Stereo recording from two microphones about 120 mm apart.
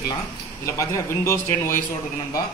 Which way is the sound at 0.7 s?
25° left (ahead or behind).